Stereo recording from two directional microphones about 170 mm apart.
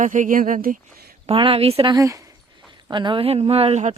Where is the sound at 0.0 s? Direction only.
50° right (ahead or behind).